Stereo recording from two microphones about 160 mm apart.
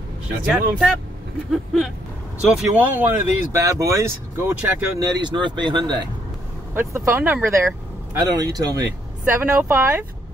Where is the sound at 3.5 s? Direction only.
20° right (ahead or behind).